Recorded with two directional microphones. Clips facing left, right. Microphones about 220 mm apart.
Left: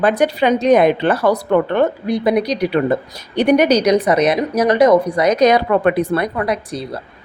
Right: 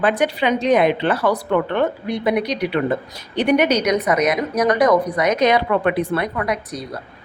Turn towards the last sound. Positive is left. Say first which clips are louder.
# left 3 dB
turn(degrees=30)  # may be behind; listen again after turning